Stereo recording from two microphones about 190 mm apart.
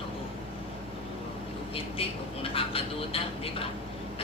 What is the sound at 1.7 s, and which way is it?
A woman's voice, 30° left (ahead or behind).